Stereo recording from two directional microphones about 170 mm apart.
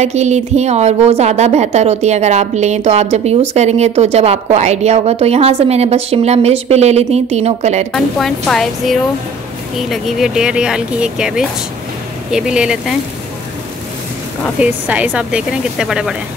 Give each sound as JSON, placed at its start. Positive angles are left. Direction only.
{"t": 0.0, "sound": "a woman's voice", "side_deg": -40}
{"t": 7.9, "sound": "speech", "side_deg": 0}
{"t": 14.6, "sound": "speech", "side_deg": -5}